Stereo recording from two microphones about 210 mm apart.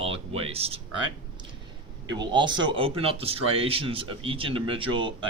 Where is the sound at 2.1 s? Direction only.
20° right (ahead or behind).